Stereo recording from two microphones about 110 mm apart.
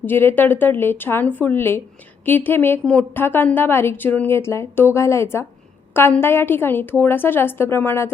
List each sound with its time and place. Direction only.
0.0 s a woman's voice: 20° left (ahead or behind)